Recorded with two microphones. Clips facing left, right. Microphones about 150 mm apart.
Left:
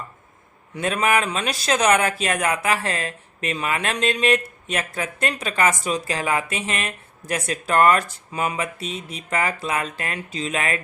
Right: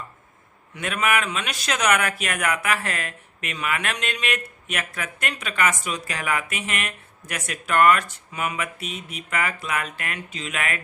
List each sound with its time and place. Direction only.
0.8 s speech: 35° left (ahead or behind)